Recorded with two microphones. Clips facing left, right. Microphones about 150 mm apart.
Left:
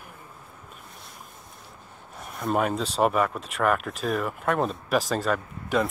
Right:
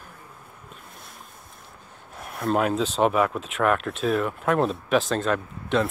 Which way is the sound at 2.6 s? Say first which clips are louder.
Right 1 dB; centre (ahead or behind).